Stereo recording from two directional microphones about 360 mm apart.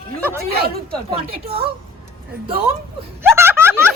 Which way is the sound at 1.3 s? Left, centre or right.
Centre.